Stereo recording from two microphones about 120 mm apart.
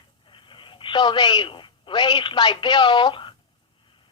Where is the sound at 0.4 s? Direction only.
40° left (ahead or behind).